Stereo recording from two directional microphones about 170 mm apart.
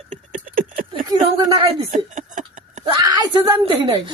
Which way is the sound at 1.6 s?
45° right (ahead or behind).